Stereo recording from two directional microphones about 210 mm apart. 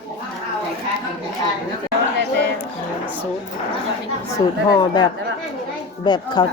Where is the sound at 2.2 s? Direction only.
55° right (ahead or behind).